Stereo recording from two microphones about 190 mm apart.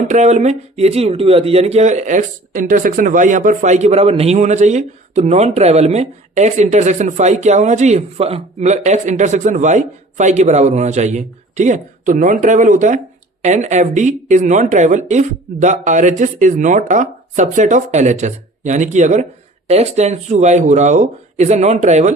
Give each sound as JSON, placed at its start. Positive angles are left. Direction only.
{"t": 0.1, "sound": "speech", "side_deg": -40}